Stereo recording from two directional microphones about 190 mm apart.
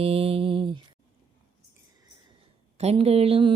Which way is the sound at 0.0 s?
30° right (ahead or behind).